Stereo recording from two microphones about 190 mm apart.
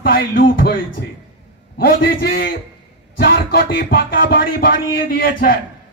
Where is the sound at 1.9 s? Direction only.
50° left (ahead or behind).